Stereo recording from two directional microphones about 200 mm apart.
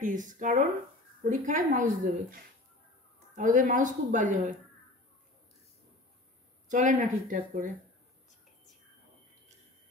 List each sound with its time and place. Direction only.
0.0 s speech: 40° right (ahead or behind)
6.7 s speech: 40° right (ahead or behind)